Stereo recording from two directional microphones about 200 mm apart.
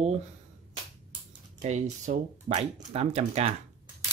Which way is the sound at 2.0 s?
40° right (ahead or behind).